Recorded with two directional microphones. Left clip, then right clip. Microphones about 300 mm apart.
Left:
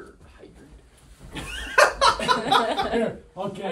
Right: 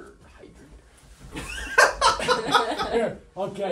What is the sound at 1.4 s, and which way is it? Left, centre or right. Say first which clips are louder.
Laughter: even; centre.